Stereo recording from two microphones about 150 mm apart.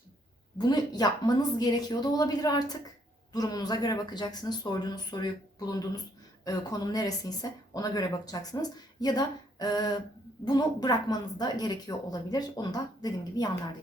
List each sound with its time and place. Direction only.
0.6 s speech: 25° left (ahead or behind)